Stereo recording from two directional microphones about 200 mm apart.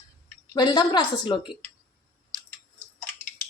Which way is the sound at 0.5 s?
20° left (ahead or behind).